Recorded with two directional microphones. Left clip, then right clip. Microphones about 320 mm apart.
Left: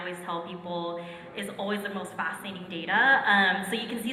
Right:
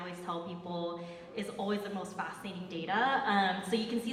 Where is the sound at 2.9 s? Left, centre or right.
Right.